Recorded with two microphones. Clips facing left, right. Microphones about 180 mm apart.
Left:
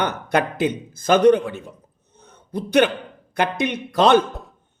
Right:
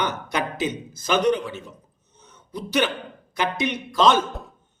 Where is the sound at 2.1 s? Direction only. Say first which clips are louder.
Left 6 dB; 55° left (ahead or behind).